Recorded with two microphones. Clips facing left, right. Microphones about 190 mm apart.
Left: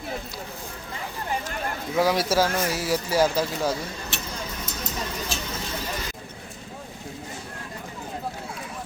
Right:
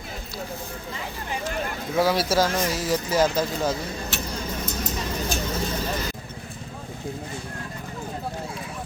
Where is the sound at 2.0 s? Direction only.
15° left (ahead or behind).